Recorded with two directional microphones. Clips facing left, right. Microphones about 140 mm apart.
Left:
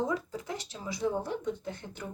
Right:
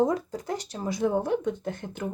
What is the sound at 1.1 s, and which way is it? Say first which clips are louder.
Speech: right 7 dB; 60° right (ahead or behind).